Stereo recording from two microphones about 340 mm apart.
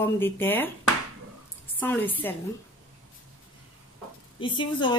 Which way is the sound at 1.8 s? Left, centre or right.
Centre.